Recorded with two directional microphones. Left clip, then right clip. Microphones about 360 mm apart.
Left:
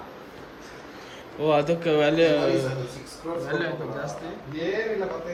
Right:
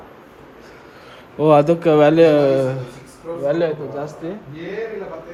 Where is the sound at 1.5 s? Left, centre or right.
Centre.